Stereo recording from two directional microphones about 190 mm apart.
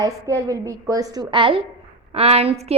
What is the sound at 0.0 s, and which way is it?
A woman's voice, 20° right (ahead or behind).